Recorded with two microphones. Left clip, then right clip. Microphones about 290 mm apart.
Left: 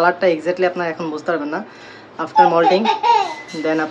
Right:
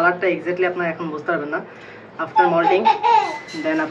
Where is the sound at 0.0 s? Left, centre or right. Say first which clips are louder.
Left 3 dB; centre.